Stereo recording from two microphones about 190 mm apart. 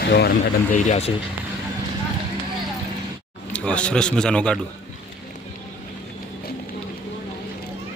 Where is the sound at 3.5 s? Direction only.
5° left (ahead or behind).